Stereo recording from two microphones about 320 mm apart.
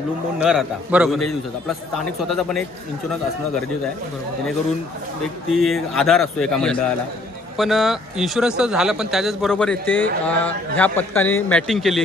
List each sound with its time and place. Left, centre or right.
0.4 s speech: centre
5.5 s speech: centre
9.8 s speech: left
10.2 s speech: centre